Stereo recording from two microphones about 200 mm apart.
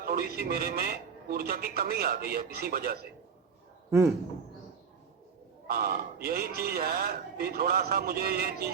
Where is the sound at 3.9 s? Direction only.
15° right (ahead or behind).